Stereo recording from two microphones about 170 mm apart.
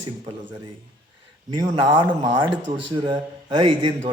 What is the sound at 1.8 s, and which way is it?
Speech, 10° right (ahead or behind).